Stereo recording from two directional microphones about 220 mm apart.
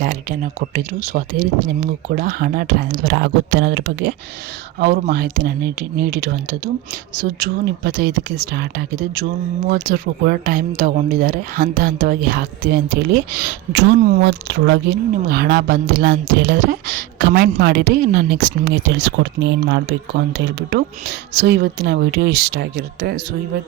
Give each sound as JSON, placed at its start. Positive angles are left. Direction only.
{"t": 0.0, "sound": "speech", "side_deg": -35}